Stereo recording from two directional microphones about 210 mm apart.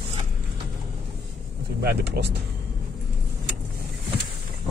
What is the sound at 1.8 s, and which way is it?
Speech, 50° right (ahead or behind).